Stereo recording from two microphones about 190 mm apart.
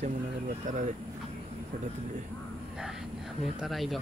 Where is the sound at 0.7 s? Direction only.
40° right (ahead or behind).